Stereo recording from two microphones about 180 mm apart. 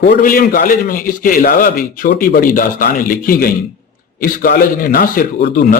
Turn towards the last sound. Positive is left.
turn(degrees=55)  # may be behind; listen again after turning